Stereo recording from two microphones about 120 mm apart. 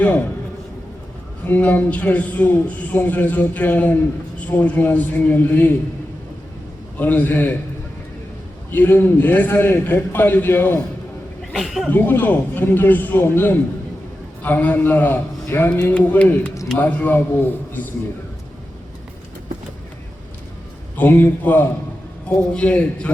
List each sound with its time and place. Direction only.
1.5 s a man's voice: 15° left (ahead or behind)
7.0 s a man's voice: 15° left (ahead or behind)
8.7 s a man's voice: 15° left (ahead or behind)
11.5 s speech: centre (ahead or behind)
11.9 s a man's voice: 15° left (ahead or behind)
20.9 s a man's voice: 15° left (ahead or behind)